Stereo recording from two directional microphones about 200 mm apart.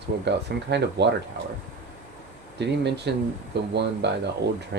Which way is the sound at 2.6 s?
60° right (ahead or behind).